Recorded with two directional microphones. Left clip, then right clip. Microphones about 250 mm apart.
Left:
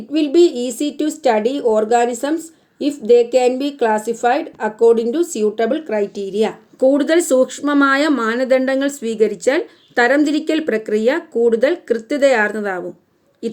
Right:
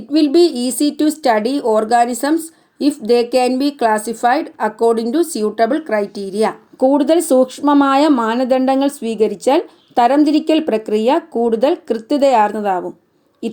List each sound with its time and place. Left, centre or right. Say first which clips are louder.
0.1 s speech: right 1 dB; right
6.7 s speech: even; centre